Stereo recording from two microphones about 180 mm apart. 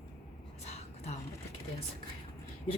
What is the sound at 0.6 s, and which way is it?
Whispering, 35° left (ahead or behind).